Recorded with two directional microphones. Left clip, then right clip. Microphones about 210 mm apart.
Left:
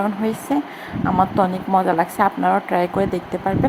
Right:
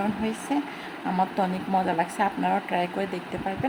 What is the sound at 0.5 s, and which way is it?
A woman's voice, 15° left (ahead or behind).